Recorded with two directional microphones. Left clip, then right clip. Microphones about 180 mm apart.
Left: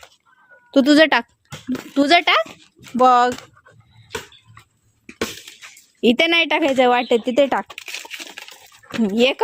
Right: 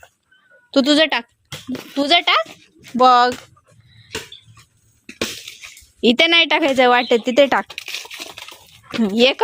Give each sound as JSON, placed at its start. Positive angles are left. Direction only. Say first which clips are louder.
{"t": 0.7, "sound": "speech", "louder": "even", "side_deg": 25}
{"t": 0.9, "sound": "a child's voice", "louder": "left 2 dB", "side_deg": 35}
{"t": 3.0, "sound": "speech", "louder": "right 1 dB", "side_deg": 15}
{"t": 6.0, "sound": "speech", "louder": "right 2 dB", "side_deg": 10}